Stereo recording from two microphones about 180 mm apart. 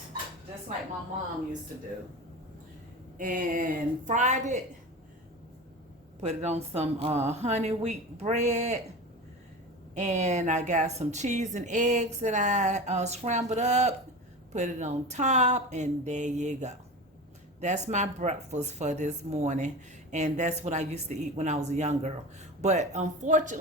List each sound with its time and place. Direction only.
3.2 s a woman's voice: 50° right (ahead or behind)
6.1 s speech: 40° right (ahead or behind)
9.9 s speech: 40° right (ahead or behind)